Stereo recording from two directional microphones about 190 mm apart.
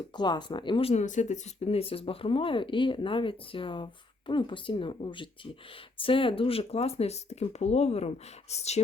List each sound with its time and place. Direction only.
0.2 s speech: 25° left (ahead or behind)